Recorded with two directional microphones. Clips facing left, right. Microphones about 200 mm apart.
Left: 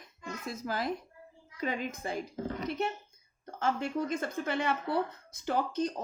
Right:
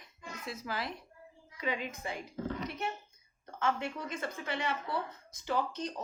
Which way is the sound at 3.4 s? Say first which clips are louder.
Left 2 dB; 40° left (ahead or behind).